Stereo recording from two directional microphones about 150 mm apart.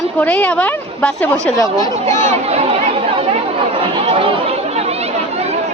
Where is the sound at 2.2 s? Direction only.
45° right (ahead or behind).